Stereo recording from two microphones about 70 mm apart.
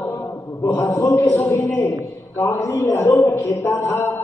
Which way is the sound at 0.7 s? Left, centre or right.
Left.